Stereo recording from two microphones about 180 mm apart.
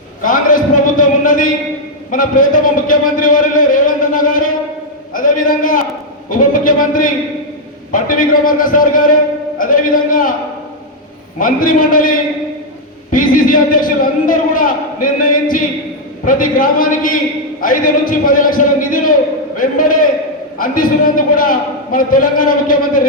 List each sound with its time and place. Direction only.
0.2 s a man's voice: 50° left (ahead or behind)
11.3 s a man's voice: 50° left (ahead or behind)
13.1 s a sound: 50° left (ahead or behind)
16.2 s a man's voice: 50° left (ahead or behind)